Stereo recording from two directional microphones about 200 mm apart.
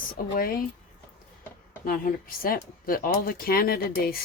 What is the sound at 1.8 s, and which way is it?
Speech, 45° left (ahead or behind).